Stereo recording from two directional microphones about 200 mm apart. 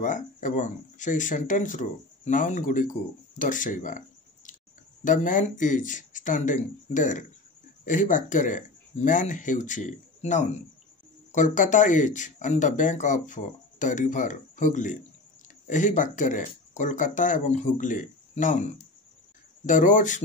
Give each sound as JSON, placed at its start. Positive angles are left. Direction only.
{"t": 0.0, "sound": "speech", "side_deg": 40}
{"t": 5.0, "sound": "speech", "side_deg": 40}